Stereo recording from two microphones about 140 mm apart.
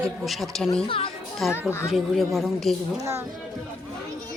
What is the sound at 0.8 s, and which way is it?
Speech, 40° left (ahead or behind).